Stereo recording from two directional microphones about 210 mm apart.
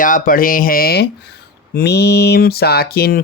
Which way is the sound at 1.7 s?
50° left (ahead or behind).